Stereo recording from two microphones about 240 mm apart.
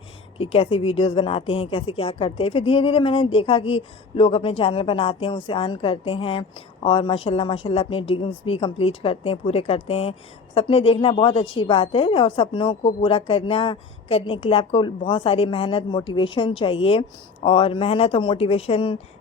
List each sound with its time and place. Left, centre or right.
0.3 s a woman's voice: left